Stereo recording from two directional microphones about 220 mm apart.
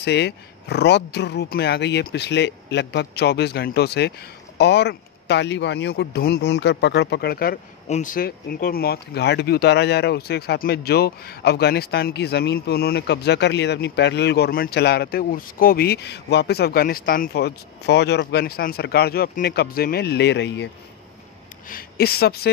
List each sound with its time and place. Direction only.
0.0 s speech: 50° left (ahead or behind)
21.6 s speech: 40° left (ahead or behind)